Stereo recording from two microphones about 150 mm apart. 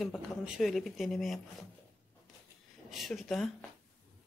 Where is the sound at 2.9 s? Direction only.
Centre (ahead or behind).